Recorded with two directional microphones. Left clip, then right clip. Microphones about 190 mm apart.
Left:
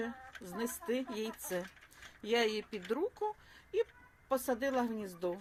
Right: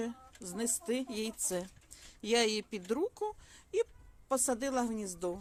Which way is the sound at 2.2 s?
70° right (ahead or behind).